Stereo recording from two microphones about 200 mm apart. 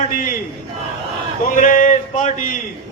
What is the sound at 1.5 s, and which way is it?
A man's voice, 40° left (ahead or behind).